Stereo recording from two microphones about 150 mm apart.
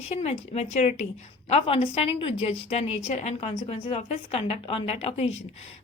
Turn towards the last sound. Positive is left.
turn(degrees=45)  # may be behind; listen again after turning